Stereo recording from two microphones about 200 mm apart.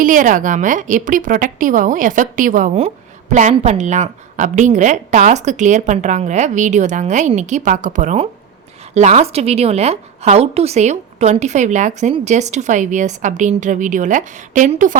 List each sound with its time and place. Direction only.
0.0 s a woman's voice: 40° right (ahead or behind)